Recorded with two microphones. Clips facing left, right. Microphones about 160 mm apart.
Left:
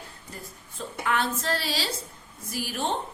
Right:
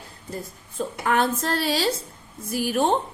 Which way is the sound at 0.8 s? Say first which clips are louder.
Right 5 dB; 45° right (ahead or behind).